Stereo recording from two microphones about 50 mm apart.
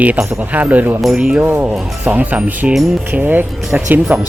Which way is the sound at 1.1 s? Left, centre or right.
Centre.